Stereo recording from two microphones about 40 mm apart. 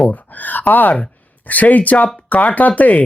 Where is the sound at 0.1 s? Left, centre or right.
Left.